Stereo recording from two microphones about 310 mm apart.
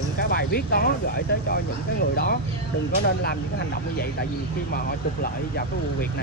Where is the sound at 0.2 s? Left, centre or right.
Left.